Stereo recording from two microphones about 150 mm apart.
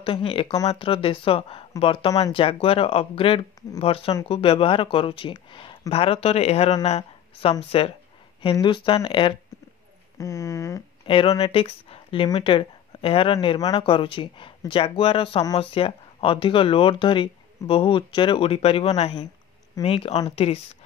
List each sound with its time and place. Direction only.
0.0 s speech: 35° left (ahead or behind)
10.1 s speech: 20° left (ahead or behind)
11.1 s speech: 35° left (ahead or behind)